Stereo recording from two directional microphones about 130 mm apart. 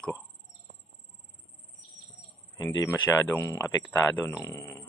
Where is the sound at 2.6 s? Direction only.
30° left (ahead or behind).